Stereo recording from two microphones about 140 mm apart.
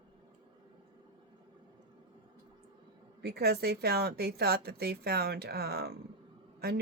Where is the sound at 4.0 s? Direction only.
90° right.